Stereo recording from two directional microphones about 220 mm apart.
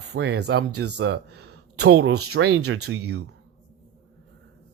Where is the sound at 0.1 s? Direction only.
50° right (ahead or behind).